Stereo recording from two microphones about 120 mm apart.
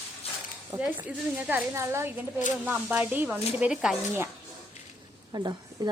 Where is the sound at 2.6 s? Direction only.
10° right (ahead or behind).